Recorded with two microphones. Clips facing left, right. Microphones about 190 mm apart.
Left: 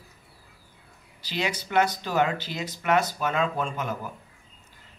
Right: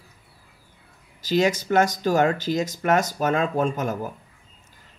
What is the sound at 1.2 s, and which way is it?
Speech, 45° right (ahead or behind).